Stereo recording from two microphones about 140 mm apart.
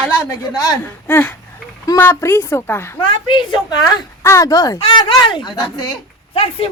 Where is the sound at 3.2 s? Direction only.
35° left (ahead or behind).